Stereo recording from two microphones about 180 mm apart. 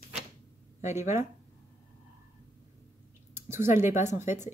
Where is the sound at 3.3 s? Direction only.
15° right (ahead or behind).